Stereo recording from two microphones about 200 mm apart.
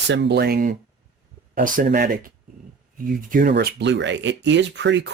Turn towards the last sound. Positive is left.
turn(degrees=-60)  # may be behind; listen again after turning